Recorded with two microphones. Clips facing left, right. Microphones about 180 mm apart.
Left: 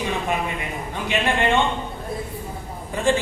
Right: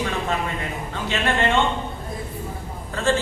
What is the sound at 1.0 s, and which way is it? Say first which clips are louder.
Speech: left 1 dB; 15° left (ahead or behind).